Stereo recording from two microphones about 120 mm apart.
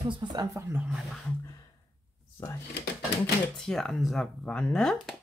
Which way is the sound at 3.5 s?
5° left (ahead or behind).